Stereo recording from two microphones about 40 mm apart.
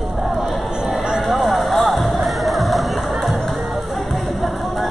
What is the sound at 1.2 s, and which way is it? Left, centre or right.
Music, centre.